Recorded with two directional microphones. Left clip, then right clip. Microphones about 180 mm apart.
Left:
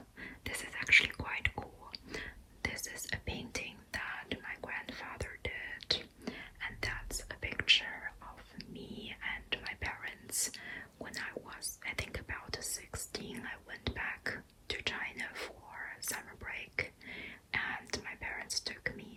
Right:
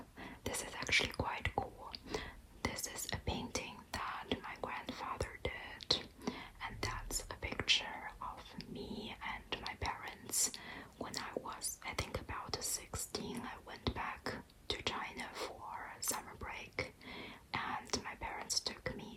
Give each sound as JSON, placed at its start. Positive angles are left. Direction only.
{"t": 0.2, "sound": "whispering", "side_deg": -15}